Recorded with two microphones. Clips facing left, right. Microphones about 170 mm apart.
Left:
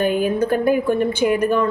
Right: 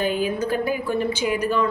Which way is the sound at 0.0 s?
55° left (ahead or behind).